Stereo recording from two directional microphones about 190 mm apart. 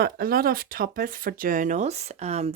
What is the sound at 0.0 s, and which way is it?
Speech, 50° right (ahead or behind).